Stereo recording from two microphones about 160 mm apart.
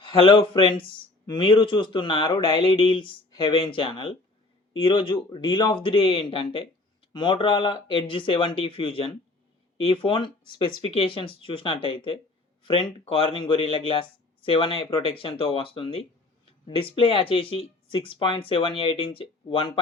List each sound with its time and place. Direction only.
0.1 s speech: 30° left (ahead or behind)